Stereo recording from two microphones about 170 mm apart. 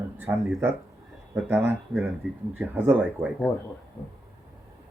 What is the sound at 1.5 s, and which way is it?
Speech, 10° right (ahead or behind).